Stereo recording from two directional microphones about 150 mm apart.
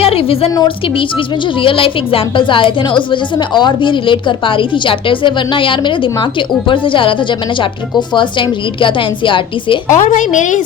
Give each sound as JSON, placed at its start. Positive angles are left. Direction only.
{"t": 0.0, "sound": "a woman's voice", "side_deg": 40}
{"t": 0.5, "sound": "a woman's voice", "side_deg": 25}
{"t": 9.9, "sound": "a woman's voice", "side_deg": 60}